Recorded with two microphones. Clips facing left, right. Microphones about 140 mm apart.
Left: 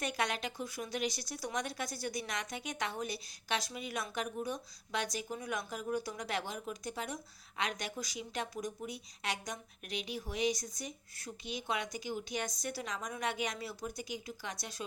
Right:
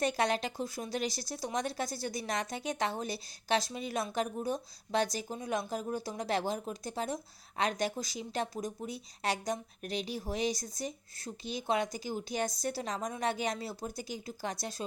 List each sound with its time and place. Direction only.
0.0 s speech: 35° right (ahead or behind)